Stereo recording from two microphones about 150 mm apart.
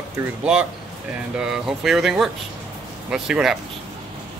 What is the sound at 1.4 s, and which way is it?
Speech, 5° right (ahead or behind).